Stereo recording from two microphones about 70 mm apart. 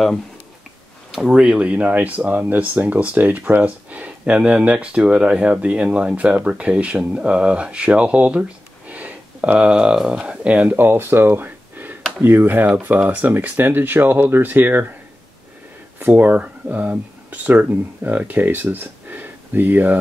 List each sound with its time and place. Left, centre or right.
1.1 s speech: centre; by 14.9 s right
16.1 s speech: right